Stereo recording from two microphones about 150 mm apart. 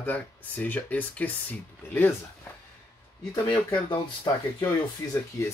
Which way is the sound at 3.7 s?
30° left (ahead or behind).